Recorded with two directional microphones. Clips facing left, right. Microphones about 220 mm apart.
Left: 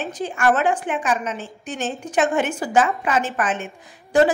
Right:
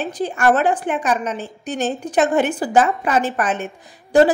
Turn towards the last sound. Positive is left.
turn(degrees=-35)  # may be behind; listen again after turning